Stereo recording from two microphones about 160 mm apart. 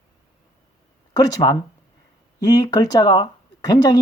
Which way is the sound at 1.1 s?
25° left (ahead or behind).